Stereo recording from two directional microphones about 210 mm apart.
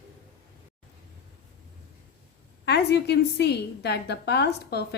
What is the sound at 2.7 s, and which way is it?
A woman's voice, 55° left (ahead or behind).